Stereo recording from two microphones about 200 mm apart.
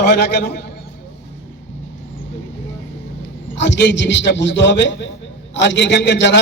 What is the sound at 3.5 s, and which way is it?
A man's voice, 60° left (ahead or behind).